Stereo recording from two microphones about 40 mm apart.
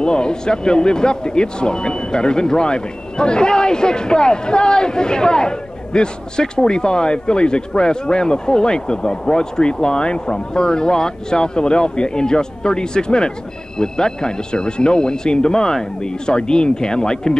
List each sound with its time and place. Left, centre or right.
0.0 s speech: left